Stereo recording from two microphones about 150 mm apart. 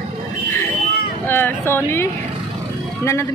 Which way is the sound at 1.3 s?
15° left (ahead or behind).